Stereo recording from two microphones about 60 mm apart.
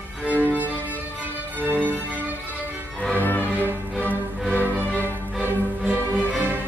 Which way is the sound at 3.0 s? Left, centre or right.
Left.